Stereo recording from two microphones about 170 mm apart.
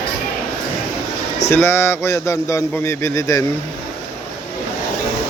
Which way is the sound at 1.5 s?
15° left (ahead or behind).